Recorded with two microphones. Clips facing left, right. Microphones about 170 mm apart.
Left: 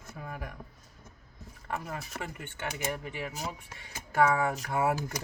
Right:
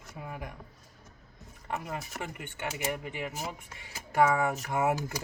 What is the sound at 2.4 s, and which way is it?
Speech, 15° right (ahead or behind).